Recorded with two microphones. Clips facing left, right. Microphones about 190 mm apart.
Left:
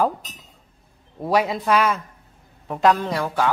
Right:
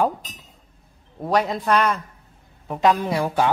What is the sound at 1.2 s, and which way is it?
Speech, 5° left (ahead or behind).